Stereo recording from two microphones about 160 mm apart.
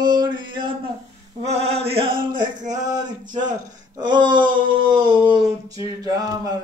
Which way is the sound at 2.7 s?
25° right (ahead or behind).